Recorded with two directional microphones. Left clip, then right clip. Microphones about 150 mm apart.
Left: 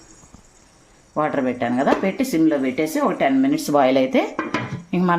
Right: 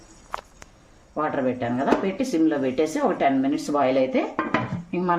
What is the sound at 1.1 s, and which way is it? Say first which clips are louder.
Speech: left 3 dB; 50° left (ahead or behind).